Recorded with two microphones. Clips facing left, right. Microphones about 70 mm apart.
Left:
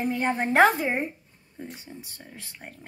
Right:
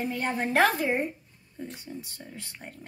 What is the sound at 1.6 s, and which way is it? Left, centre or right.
Speech, centre.